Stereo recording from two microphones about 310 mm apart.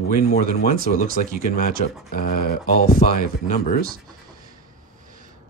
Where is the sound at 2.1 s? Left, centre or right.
Left.